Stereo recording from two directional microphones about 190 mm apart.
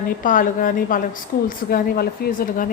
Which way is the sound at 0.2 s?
45° left (ahead or behind).